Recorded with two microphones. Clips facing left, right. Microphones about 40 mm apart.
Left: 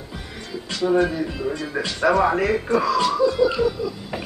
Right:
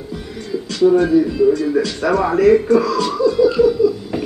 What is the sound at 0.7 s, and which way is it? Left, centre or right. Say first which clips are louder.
Speech: right 7 dB; centre.